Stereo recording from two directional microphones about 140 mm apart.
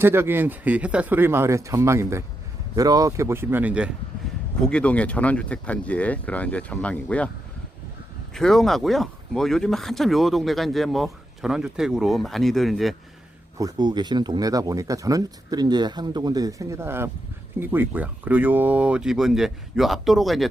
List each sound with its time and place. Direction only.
0.0 s speech: 15° right (ahead or behind)
4.6 s speech: 5° left (ahead or behind)
8.3 s speech: 5° left (ahead or behind)
13.6 s speech: 30° right (ahead or behind); by 20.5 s centre (ahead or behind)